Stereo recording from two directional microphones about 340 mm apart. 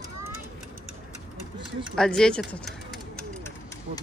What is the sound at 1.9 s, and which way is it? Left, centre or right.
Pigeon, centre.